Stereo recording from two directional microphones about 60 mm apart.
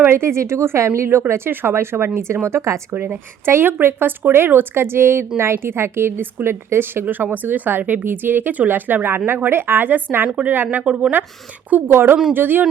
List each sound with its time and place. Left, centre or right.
0.0 s speech: right
2.9 s a woman's voice: right; by 11.1 s centre
11.9 s a woman's voice: right